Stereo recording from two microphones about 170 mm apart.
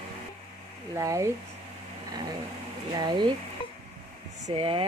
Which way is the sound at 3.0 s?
25° right (ahead or behind).